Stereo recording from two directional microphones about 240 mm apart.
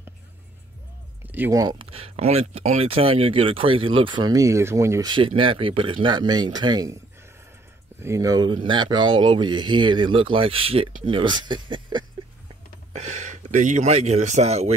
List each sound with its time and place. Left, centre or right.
1.2 s speech: centre
8.0 s speech: centre